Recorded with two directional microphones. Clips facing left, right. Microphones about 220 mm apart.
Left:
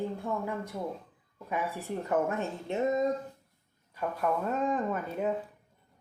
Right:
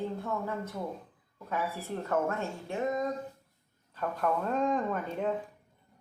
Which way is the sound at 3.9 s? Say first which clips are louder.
Even; 5° left (ahead or behind).